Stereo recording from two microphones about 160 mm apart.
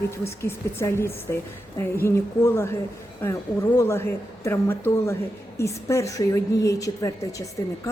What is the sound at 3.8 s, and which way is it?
A woman's voice, 15° left (ahead or behind).